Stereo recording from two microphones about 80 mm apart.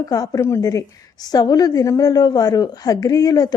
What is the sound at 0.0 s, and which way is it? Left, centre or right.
A woman's voice, left.